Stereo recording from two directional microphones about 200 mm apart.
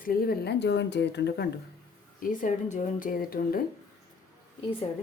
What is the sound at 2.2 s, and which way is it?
Speech, 40° left (ahead or behind).